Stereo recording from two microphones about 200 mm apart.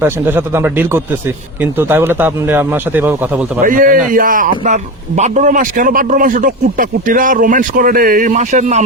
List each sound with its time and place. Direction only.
0.0 s a man's voice: 10° right (ahead or behind)
3.6 s a man's voice: 40° right (ahead or behind)